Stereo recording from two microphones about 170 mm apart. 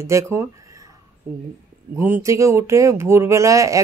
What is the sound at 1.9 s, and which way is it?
Speech, 10° right (ahead or behind).